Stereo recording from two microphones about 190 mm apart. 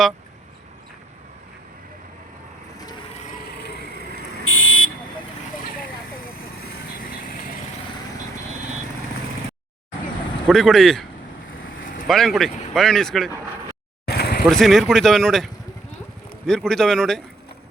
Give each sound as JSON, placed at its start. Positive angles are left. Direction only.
{"t": 4.4, "sound": "buzzer", "side_deg": 90}
{"t": 10.4, "sound": "speech", "side_deg": 0}
{"t": 12.0, "sound": "speech", "side_deg": 0}
{"t": 14.0, "sound": "a sound", "side_deg": 55}
{"t": 14.4, "sound": "speech", "side_deg": 0}
{"t": 16.5, "sound": "speech", "side_deg": 5}